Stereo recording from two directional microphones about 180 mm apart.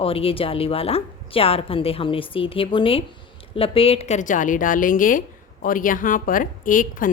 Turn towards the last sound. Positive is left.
turn(degrees=50)  # may be behind; listen again after turning